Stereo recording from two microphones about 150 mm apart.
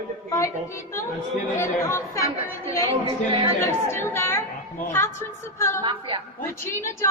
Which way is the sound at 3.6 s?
15° left (ahead or behind).